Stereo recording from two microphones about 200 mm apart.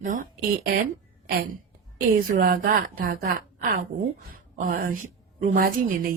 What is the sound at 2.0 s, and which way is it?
Speech, 45° right (ahead or behind).